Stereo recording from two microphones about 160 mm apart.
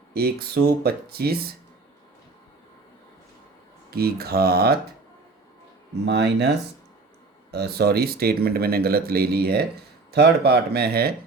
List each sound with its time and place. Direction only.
0.1 s speech: 75° right (ahead or behind)
3.9 s speech: 75° right (ahead or behind)
6.1 s speech: 90° right
7.5 s speech: 85° right
10.1 s speech: 90° right